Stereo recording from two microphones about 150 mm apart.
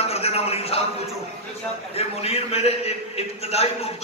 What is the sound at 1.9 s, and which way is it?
A man's voice, 45° left (ahead or behind).